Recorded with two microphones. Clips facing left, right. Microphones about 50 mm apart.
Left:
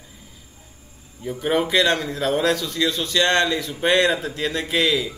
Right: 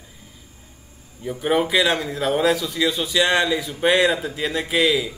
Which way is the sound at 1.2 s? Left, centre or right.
Centre.